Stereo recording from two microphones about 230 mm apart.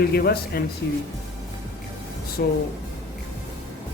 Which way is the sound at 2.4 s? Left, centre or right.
Left.